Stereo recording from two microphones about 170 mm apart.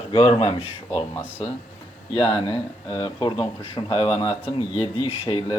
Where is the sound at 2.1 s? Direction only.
30° left (ahead or behind).